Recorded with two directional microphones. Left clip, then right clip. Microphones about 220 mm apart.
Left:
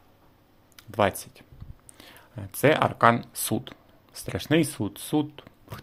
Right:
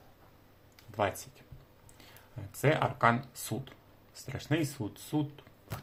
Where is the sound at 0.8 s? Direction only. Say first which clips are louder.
Left 8 dB; 45° left (ahead or behind).